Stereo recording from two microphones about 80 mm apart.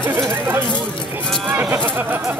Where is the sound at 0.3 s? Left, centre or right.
Right.